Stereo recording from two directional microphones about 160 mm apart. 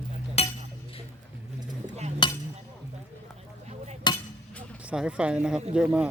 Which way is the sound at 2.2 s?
30° left (ahead or behind).